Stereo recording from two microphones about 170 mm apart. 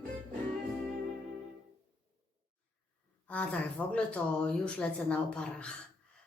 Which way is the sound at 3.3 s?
10° left (ahead or behind).